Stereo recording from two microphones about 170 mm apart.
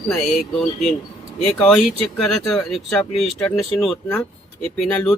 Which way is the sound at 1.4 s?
5° left (ahead or behind).